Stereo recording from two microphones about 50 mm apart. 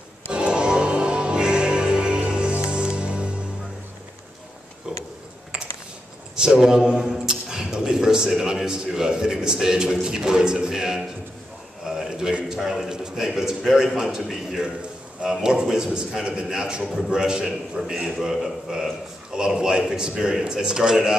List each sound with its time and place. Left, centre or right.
0.3 s music: centre
6.3 s a man's voice: centre
11.8 s a sound: centre
12.5 s a man's voice: centre
15.2 s a man's voice: centre